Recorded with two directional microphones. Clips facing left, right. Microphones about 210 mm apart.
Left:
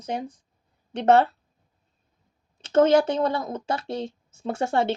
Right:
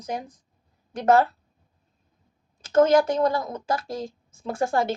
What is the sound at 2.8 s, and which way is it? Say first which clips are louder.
Speech: even; 25° left (ahead or behind).